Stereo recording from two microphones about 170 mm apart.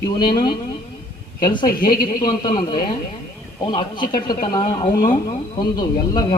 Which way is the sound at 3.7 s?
25° left (ahead or behind).